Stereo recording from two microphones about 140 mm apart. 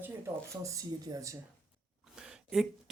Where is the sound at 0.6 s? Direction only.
25° right (ahead or behind).